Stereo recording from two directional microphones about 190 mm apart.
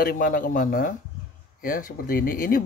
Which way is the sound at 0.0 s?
50° left (ahead or behind).